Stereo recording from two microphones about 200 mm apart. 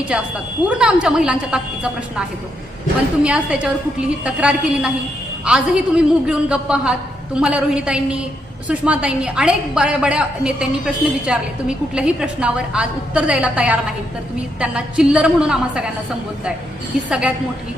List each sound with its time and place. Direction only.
0.1 s a woman's voice: 5° right (ahead or behind)
3.2 s a woman's voice: 5° right (ahead or behind)
17.1 s a woman's voice: 5° right (ahead or behind)